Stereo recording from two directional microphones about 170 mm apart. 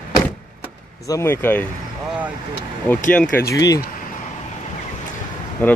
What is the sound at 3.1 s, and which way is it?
Speech, 10° left (ahead or behind).